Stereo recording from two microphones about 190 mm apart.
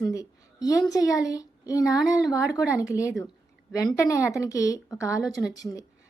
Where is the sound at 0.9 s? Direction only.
20° left (ahead or behind).